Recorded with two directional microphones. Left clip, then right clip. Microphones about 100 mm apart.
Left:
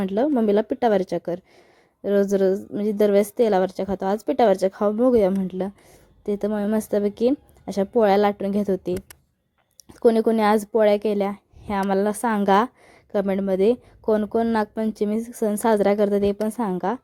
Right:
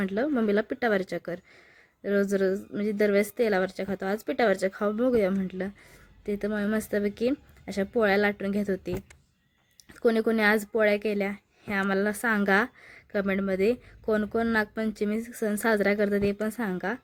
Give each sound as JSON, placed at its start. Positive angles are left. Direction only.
{"t": 0.0, "sound": "a woman's voice", "side_deg": 30}
{"t": 14.2, "sound": "speech", "side_deg": 15}
{"t": 14.5, "sound": "a woman's voice", "side_deg": 30}